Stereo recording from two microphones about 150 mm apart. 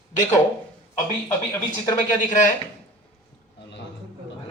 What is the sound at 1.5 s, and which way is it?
Speech, 20° left (ahead or behind).